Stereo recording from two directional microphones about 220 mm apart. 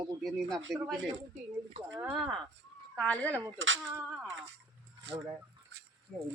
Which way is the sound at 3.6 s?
60° right (ahead or behind).